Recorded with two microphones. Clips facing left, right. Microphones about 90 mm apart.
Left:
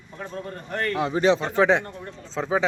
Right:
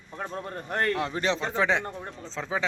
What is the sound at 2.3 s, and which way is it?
Speech, 25° left (ahead or behind).